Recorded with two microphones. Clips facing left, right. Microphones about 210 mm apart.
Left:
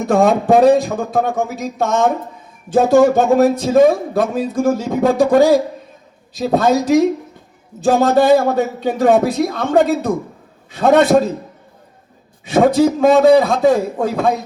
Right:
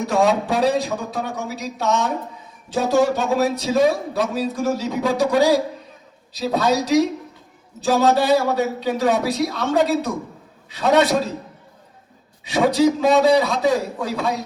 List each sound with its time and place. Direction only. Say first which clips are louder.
0.0 s a man's voice: left 5 dB; 50° left (ahead or behind)
12.5 s a man's voice: left 4 dB; 50° left (ahead or behind)